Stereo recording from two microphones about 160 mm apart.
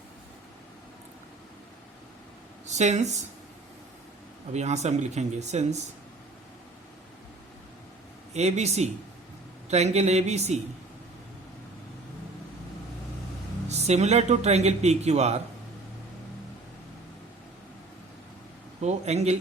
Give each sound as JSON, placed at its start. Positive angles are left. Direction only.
{"t": 2.6, "sound": "a man's voice", "side_deg": -45}
{"t": 4.5, "sound": "a man's voice", "side_deg": -45}
{"t": 8.3, "sound": "a man's voice", "side_deg": -45}
{"t": 13.7, "sound": "a man's voice", "side_deg": -45}
{"t": 18.8, "sound": "a man's voice", "side_deg": -45}